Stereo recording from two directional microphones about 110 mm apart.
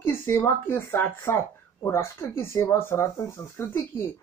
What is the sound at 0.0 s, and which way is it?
Speech, 20° left (ahead or behind).